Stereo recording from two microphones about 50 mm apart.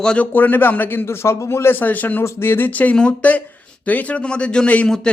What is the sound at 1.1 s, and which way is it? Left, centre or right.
Speech, left.